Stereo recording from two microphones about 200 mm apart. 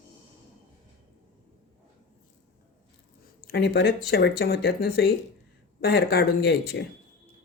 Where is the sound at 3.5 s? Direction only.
55° left (ahead or behind).